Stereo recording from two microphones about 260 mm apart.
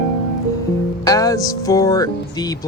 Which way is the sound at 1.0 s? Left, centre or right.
Centre.